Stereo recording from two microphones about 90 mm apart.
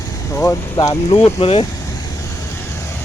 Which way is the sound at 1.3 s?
90° left.